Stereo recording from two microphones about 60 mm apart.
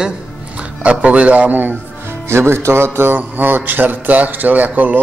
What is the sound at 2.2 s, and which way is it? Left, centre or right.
A man's voice, right.